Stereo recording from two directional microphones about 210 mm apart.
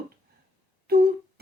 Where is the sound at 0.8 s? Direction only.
45° right (ahead or behind).